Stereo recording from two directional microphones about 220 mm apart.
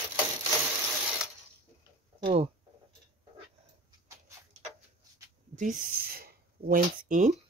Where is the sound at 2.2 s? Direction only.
25° right (ahead or behind).